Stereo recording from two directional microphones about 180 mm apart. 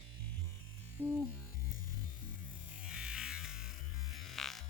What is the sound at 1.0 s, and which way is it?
Music, 10° right (ahead or behind).